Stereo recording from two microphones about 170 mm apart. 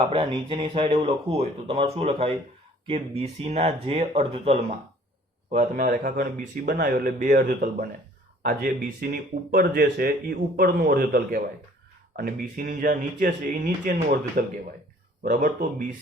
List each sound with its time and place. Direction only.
0.1 s speech: 30° right (ahead or behind)
5.5 s a man's voice: 45° right (ahead or behind)
15.2 s a man's voice: 45° right (ahead or behind)